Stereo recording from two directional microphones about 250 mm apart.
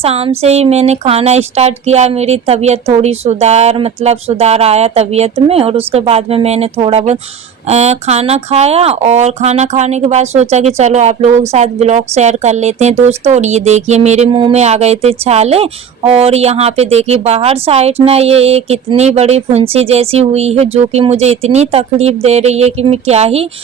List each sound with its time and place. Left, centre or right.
0.0 s speech: right